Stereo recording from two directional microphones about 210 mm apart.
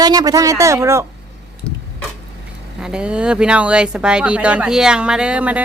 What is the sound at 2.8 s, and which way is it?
Speech, 5° right (ahead or behind).